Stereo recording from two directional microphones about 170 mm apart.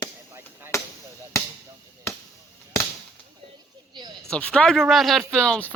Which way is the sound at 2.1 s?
15° left (ahead or behind).